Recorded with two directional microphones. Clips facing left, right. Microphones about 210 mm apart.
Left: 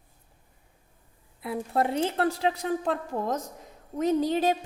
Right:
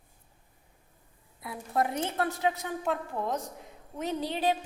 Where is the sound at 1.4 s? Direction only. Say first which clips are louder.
Left 3 dB; 25° left (ahead or behind).